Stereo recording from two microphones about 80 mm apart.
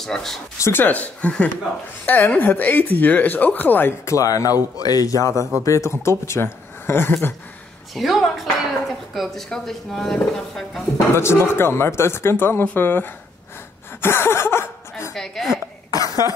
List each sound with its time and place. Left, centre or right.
0.0 s speech: centre
0.6 s speech: left
4.0 s speech: left
7.9 s speech: centre
11.1 s speech: left
15.1 s speech: centre